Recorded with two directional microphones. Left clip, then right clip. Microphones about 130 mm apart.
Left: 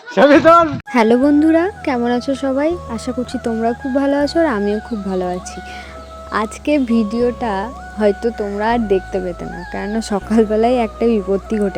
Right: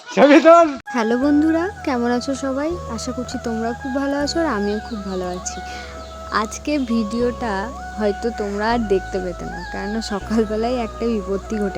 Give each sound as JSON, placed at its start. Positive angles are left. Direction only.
{"t": 0.3, "sound": "speech", "side_deg": 5}
{"t": 0.9, "sound": "speech", "side_deg": 20}
{"t": 9.7, "sound": "speech", "side_deg": 20}